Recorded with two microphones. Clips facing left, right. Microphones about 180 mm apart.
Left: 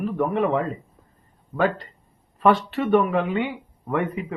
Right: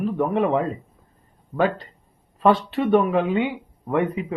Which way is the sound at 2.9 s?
15° right (ahead or behind).